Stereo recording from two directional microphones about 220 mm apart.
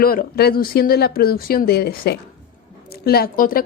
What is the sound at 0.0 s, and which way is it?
A woman's voice, 40° left (ahead or behind).